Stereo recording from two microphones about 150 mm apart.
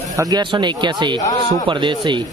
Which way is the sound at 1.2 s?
25° left (ahead or behind).